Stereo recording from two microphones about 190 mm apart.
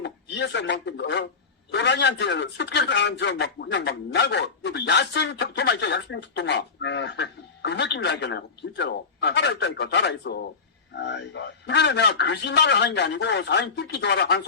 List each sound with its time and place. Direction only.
0.0 s speech: 65° left (ahead or behind)